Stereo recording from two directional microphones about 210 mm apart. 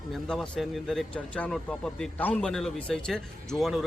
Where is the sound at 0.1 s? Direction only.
Centre (ahead or behind).